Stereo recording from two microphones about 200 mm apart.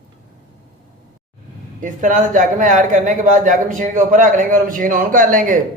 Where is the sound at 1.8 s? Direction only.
40° right (ahead or behind).